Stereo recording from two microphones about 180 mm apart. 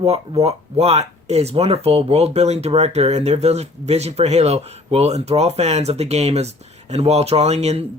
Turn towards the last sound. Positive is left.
turn(degrees=-35)  # may be behind; listen again after turning